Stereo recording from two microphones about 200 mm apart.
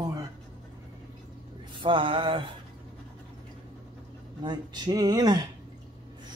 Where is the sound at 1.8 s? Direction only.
25° right (ahead or behind).